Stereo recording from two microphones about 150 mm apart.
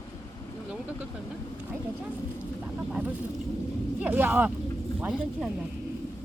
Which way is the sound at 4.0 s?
15° right (ahead or behind).